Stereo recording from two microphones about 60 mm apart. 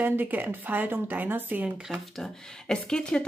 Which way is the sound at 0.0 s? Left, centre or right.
Right.